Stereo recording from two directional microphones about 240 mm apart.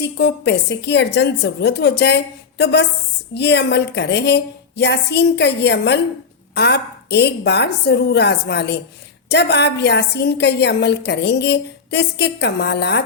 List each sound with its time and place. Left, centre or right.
0.0 s a woman's voice: left